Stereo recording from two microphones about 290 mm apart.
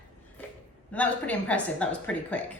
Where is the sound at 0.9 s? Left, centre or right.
Centre.